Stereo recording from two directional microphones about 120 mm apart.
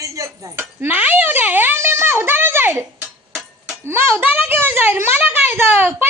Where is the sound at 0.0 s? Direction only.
25° right (ahead or behind).